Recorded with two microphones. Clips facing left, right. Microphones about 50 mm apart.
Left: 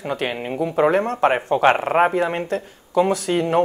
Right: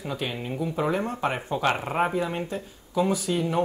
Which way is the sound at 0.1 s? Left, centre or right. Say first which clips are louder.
Left 7 dB; left.